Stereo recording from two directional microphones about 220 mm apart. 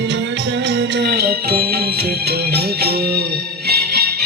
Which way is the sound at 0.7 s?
50° right (ahead or behind).